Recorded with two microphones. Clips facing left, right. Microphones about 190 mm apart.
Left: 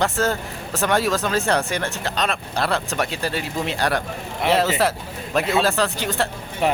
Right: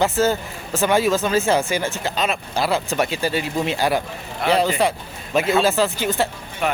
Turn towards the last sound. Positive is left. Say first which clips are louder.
# left 2 dB
turn(degrees=30)  # may be behind; listen again after turning